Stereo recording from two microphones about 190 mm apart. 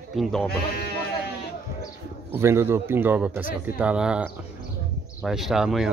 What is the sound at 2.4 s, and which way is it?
A man's voice, 15° right (ahead or behind).